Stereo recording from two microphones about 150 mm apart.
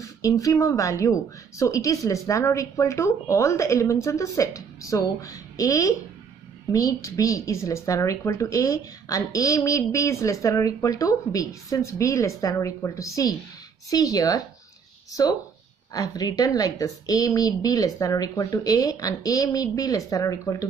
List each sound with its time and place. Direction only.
0.0 s a woman's voice: 20° left (ahead or behind)